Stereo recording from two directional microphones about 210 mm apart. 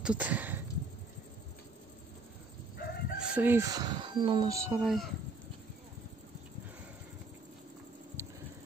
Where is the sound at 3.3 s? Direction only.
10° right (ahead or behind).